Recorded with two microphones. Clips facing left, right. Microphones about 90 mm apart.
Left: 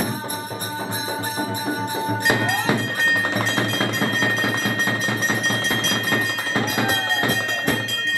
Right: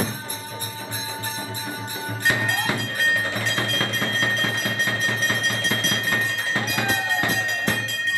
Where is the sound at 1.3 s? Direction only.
20° left (ahead or behind).